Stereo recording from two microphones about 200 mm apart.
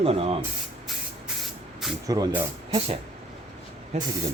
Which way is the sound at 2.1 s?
20° right (ahead or behind).